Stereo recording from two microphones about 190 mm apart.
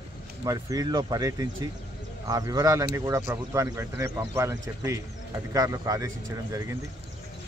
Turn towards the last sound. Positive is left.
turn(degrees=-15)  # may be behind; listen again after turning